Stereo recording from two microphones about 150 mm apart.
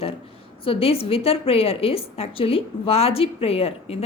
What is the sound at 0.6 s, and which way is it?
A woman's voice, 40° left (ahead or behind).